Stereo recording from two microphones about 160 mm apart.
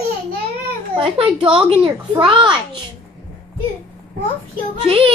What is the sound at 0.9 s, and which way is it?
A child's voice, 35° right (ahead or behind).